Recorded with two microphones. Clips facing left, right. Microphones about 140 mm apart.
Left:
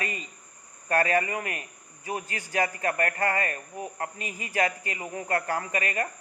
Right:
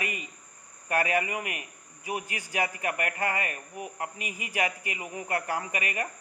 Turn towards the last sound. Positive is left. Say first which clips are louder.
# left 3 dB
turn(degrees=-15)  # may be behind; listen again after turning